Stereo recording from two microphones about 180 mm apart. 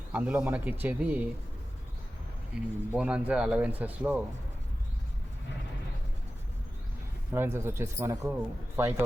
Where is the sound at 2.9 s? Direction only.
5° right (ahead or behind).